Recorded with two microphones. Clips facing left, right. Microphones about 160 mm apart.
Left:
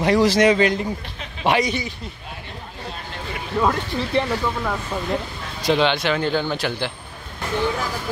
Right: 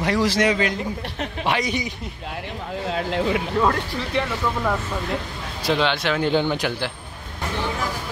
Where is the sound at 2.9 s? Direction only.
90° right.